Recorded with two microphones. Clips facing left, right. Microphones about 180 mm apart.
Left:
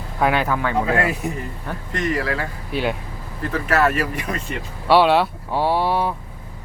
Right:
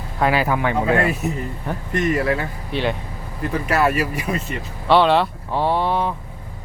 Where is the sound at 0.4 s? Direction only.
15° right (ahead or behind).